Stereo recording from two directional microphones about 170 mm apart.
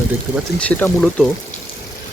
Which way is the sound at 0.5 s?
10° left (ahead or behind).